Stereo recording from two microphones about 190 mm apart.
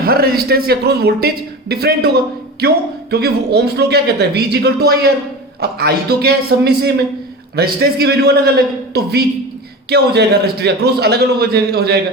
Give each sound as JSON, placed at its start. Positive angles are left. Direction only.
{"t": 0.0, "sound": "a man's voice", "side_deg": -55}